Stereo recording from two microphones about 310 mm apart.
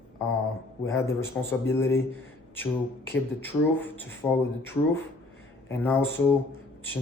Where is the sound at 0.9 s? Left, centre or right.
Centre.